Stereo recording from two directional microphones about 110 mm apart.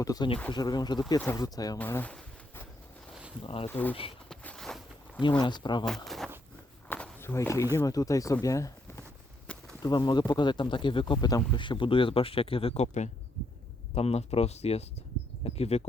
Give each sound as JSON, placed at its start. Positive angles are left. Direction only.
{"t": 0.0, "sound": "speech", "side_deg": 35}
{"t": 1.8, "sound": "speech", "side_deg": 15}
{"t": 3.4, "sound": "speech", "side_deg": 60}
{"t": 3.7, "sound": "speech", "side_deg": 15}
{"t": 4.3, "sound": "walk", "side_deg": 5}
{"t": 5.4, "sound": "speech", "side_deg": 45}
{"t": 6.1, "sound": "a sound", "side_deg": 0}
{"t": 6.8, "sound": "speech", "side_deg": 15}
{"t": 9.5, "sound": "a sound", "side_deg": 10}
{"t": 9.8, "sound": "speech", "side_deg": 40}
{"t": 13.9, "sound": "speech", "side_deg": 70}